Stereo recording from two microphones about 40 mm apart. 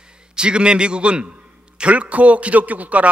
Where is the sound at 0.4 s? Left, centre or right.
Right.